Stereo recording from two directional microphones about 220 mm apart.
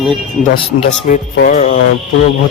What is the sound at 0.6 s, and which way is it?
Speech, 30° left (ahead or behind).